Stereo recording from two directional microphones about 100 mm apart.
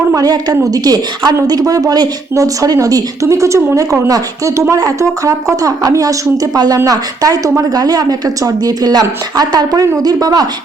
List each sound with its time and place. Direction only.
0.1 s a woman's voice: 40° right (ahead or behind)